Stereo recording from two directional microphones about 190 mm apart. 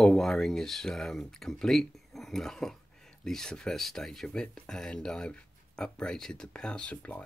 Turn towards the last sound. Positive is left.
turn(degrees=5)  # may be behind; listen again after turning